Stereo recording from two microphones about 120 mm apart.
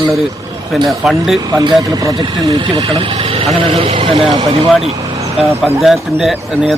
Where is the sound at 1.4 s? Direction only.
30° right (ahead or behind).